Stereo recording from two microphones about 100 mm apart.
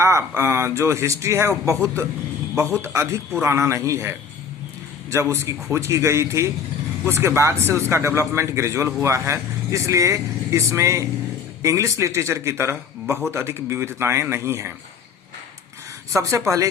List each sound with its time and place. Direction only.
0.0 s a man's voice: 30° right (ahead or behind)
5.1 s a man's voice: 25° right (ahead or behind)